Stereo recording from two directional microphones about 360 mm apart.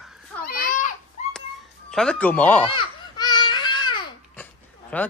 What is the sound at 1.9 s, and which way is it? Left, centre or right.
Babbling, centre.